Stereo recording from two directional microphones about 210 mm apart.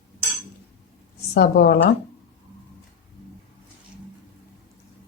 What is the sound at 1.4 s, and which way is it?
Speech, 50° left (ahead or behind).